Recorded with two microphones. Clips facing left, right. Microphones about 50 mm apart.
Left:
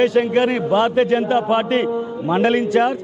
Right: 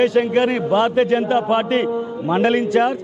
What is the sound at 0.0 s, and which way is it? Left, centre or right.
A man's voice, left.